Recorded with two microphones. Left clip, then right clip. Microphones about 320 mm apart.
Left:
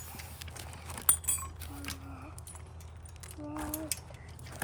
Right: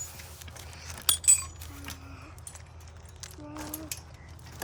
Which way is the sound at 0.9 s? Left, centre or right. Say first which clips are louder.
Right 9 dB; centre.